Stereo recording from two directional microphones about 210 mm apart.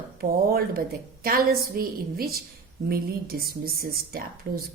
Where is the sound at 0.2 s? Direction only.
45° right (ahead or behind).